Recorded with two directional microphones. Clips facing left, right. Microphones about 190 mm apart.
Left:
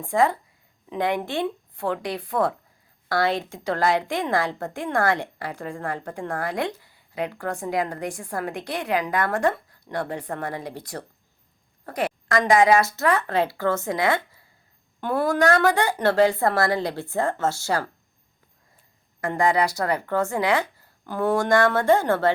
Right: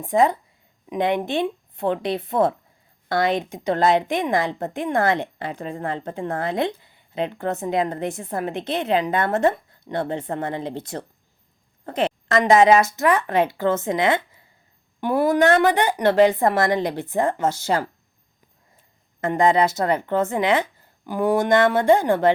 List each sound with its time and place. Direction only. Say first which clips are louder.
0.0 s a woman's voice: right 3 dB; 20° right (ahead or behind)
19.2 s a woman's voice: right 3 dB; 20° right (ahead or behind)